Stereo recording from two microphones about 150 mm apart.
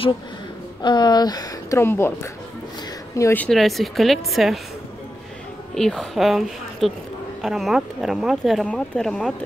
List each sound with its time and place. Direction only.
0.8 s speech: 30° left (ahead or behind)
3.2 s speech: 20° left (ahead or behind)
3.4 s speech: centre (ahead or behind)
5.8 s speech: centre (ahead or behind)